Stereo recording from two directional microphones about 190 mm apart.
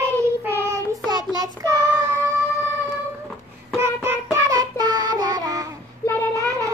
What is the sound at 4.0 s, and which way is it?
Child singing, 15° right (ahead or behind).